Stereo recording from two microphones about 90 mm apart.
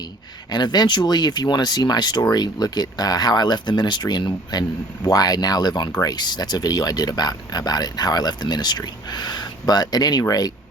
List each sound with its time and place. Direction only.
0.5 s speech: 50° left (ahead or behind)